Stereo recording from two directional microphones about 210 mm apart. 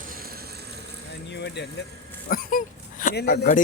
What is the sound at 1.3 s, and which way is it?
Speech, 55° left (ahead or behind).